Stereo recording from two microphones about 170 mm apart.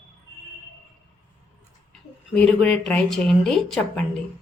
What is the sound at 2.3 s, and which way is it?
Speech, 5° left (ahead or behind).